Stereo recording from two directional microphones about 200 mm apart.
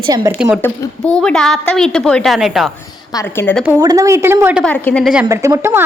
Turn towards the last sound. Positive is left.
turn(degrees=-10)  # may be behind; listen again after turning